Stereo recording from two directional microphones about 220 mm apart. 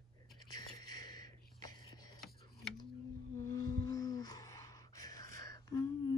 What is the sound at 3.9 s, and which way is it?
Music, 15° left (ahead or behind).